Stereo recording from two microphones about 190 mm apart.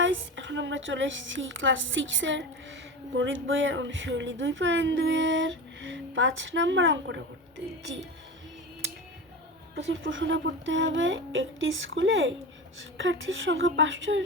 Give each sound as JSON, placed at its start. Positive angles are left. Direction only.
{"t": 0.0, "sound": "a woman's voice", "side_deg": -75}
{"t": 10.0, "sound": "speech", "side_deg": -80}